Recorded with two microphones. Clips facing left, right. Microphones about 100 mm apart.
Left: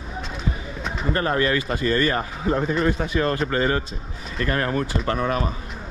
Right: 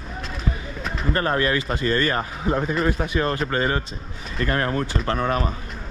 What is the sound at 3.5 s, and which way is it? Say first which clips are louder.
Speech: left 1 dB; 35° right (ahead or behind).